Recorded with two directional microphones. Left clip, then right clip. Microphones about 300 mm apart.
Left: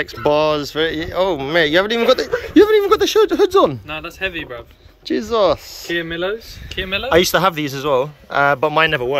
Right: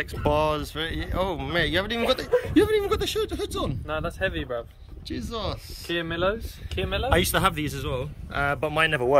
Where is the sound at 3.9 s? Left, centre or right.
Right.